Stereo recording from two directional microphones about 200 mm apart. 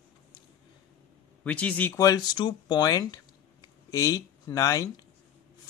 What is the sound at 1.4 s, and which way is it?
Speech, 5° left (ahead or behind).